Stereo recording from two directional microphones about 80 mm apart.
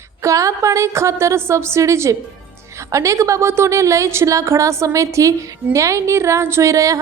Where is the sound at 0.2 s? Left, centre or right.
Right.